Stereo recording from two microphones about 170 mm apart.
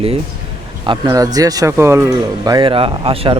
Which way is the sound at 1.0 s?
20° right (ahead or behind).